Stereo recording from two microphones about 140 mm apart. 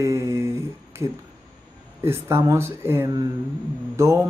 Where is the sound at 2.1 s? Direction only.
20° right (ahead or behind).